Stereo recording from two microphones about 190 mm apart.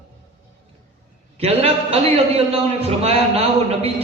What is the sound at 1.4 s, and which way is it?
A man's voice, 30° right (ahead or behind).